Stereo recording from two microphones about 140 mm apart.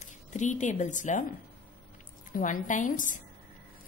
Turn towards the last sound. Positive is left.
turn(degrees=65)  # may be behind; listen again after turning